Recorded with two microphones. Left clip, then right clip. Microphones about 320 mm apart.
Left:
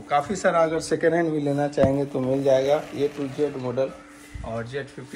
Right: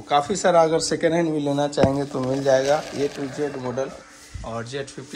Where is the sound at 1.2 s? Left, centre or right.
Right.